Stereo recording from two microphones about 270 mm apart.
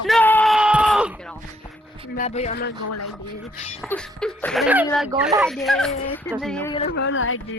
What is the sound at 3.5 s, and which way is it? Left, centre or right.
Speech, left.